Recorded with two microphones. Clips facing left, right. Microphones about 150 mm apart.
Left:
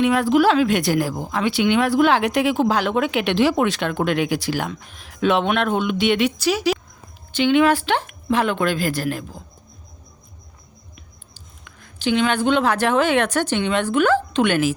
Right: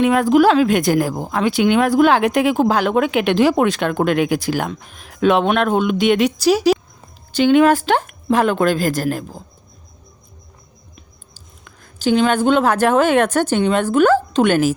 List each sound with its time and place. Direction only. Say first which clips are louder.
0.0 s a woman's voice: right 3 dB; 45° right (ahead or behind)
11.3 s a woman's voice: right 1 dB; 40° right (ahead or behind)